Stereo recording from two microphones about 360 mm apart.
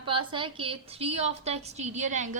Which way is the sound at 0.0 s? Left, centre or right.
Centre.